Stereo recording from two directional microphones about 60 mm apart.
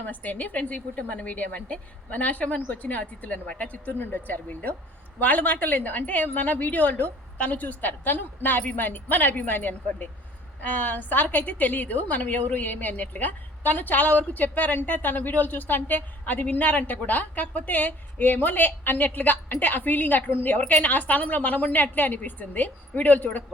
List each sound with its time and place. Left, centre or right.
0.0 s a woman's voice: left